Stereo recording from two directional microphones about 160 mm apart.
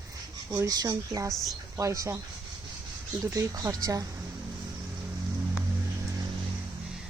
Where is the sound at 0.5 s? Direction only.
20° right (ahead or behind).